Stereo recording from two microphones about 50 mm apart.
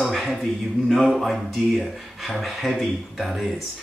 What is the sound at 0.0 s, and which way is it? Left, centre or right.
Speech, centre.